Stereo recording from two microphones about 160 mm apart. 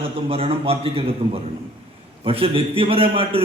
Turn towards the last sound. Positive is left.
turn(degrees=-35)  # may be behind; listen again after turning